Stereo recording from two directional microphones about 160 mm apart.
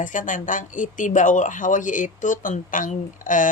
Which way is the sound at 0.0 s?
55° left (ahead or behind).